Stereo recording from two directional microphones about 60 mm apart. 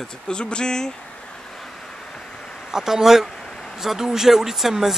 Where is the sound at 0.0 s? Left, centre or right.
Centre.